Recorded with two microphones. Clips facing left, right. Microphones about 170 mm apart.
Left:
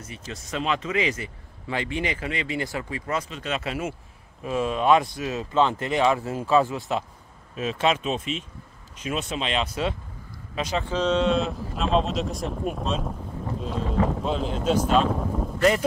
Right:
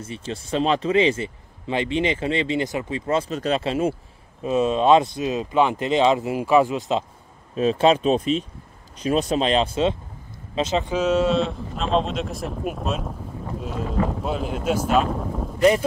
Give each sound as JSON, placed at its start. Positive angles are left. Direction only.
{"t": 0.0, "sound": "speech", "side_deg": -30}
{"t": 3.3, "sound": "speech", "side_deg": -40}
{"t": 7.5, "sound": "speech", "side_deg": -35}
{"t": 14.2, "sound": "speech", "side_deg": -5}